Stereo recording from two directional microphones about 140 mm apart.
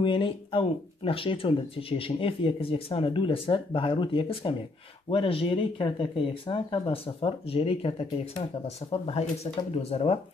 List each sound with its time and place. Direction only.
0.0 s speech: 35° left (ahead or behind)